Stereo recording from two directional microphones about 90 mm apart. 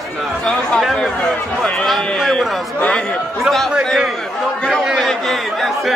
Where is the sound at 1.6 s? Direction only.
5° left (ahead or behind).